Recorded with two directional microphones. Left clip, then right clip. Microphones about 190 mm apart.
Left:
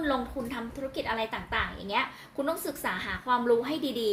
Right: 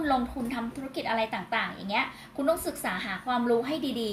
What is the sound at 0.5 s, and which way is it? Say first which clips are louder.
A woman's voice: even; 40° left (ahead or behind).